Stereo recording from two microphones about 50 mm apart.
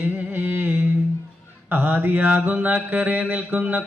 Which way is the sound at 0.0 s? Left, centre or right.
Right.